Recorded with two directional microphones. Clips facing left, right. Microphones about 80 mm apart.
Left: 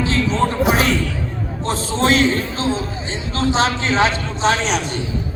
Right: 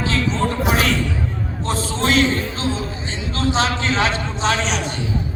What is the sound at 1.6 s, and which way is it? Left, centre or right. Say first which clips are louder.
A man's voice: left 3 dB; left.